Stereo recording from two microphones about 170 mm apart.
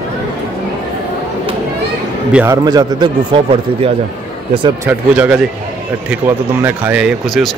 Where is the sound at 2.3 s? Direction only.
10° right (ahead or behind).